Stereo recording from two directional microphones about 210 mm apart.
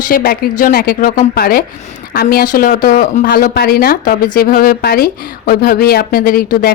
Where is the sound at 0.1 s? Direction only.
45° left (ahead or behind).